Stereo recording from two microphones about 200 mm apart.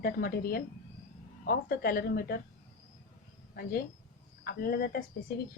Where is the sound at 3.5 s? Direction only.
50° left (ahead or behind).